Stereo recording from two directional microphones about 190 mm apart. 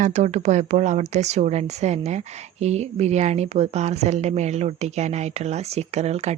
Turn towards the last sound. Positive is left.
turn(degrees=-35)  # may be behind; listen again after turning